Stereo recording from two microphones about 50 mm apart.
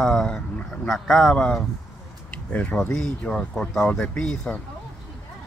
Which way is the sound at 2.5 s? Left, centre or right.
Left.